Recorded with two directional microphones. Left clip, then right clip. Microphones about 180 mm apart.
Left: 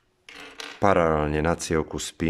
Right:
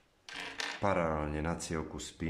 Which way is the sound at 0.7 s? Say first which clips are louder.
Left 12 dB; 55° left (ahead or behind).